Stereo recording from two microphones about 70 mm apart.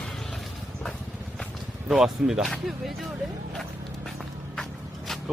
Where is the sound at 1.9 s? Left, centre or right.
Centre.